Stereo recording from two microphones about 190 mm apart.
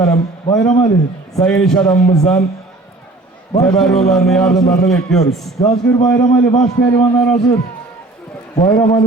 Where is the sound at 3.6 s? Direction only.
Centre (ahead or behind).